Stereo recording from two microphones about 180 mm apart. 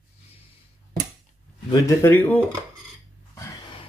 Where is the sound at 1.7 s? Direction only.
15° left (ahead or behind).